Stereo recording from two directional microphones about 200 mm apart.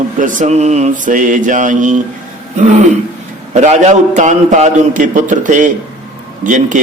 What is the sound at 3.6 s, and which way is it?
A man's voice, 35° right (ahead or behind).